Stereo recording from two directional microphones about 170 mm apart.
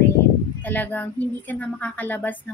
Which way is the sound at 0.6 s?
10° left (ahead or behind).